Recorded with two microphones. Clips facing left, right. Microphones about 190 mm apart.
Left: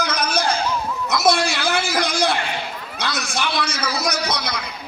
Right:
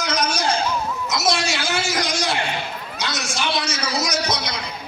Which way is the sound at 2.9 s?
60° left (ahead or behind).